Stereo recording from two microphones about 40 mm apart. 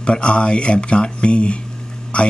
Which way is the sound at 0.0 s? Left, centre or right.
Left.